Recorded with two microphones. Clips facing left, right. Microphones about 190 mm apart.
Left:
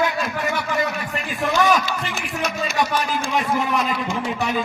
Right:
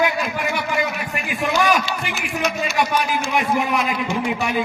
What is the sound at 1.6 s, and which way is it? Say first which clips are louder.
Speech: even; 15° right (ahead or behind).